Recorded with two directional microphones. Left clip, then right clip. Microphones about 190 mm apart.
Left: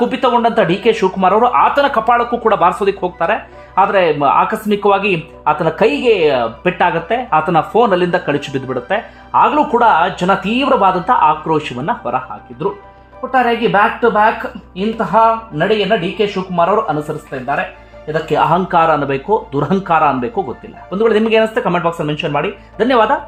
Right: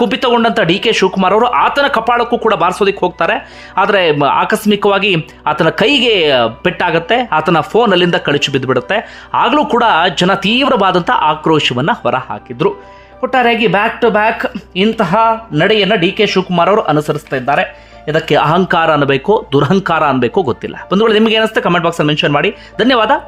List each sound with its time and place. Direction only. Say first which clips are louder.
0.0 s speech: right 1 dB; 15° right (ahead or behind)